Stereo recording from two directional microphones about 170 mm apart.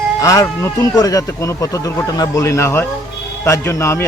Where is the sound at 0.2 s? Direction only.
20° left (ahead or behind).